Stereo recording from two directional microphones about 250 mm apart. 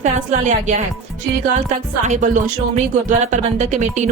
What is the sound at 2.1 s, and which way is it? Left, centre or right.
Speech, right.